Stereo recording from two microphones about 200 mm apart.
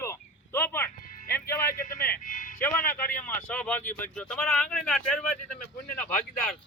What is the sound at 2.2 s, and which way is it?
Speech, 40° left (ahead or behind).